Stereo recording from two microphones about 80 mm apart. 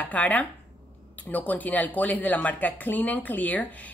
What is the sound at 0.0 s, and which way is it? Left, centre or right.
Speech, centre.